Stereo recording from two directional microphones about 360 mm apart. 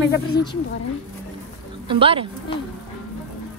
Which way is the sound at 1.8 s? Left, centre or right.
Centre.